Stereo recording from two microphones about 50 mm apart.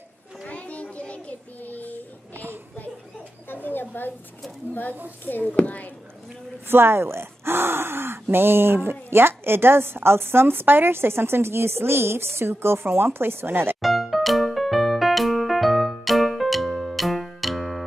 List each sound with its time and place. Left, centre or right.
0.5 s child singing: left
2.3 s a sound: right
3.6 s a sound: left
5.2 s a child's voice: left
6.7 s speech: right
13.7 s music: centre